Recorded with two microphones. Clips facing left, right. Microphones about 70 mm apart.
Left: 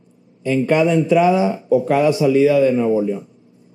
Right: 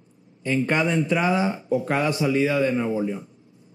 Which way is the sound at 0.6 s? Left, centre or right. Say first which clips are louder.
Left 9 dB; right.